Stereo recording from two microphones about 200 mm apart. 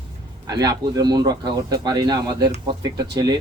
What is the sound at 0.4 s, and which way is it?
A man's voice, 20° right (ahead or behind).